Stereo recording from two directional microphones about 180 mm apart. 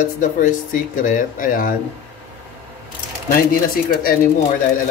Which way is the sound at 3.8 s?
55° left (ahead or behind).